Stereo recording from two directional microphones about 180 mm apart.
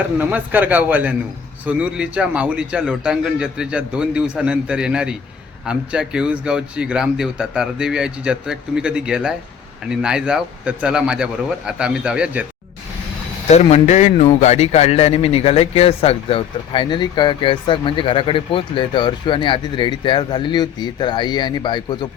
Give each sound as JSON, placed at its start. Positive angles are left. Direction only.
{"t": 0.2, "sound": "a man's voice", "side_deg": -10}
{"t": 13.5, "sound": "speech", "side_deg": 35}